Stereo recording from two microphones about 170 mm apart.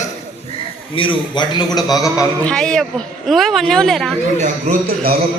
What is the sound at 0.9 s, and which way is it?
A man's voice, 30° left (ahead or behind).